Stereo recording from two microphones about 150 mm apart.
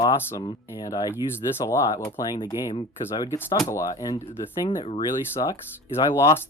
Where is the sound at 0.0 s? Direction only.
25° left (ahead or behind).